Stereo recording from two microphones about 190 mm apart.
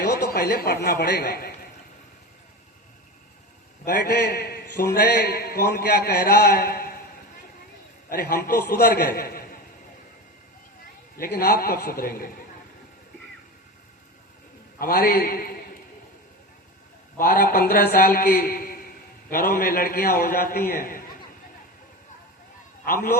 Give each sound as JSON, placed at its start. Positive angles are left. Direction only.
{"t": 0.0, "sound": "a man's voice", "side_deg": 60}
{"t": 3.8, "sound": "a man's voice", "side_deg": 55}
{"t": 8.1, "sound": "a man's voice", "side_deg": 55}
{"t": 11.2, "sound": "a man's voice", "side_deg": 55}
{"t": 14.8, "sound": "a man's voice", "side_deg": 50}
{"t": 17.2, "sound": "a man's voice", "side_deg": 45}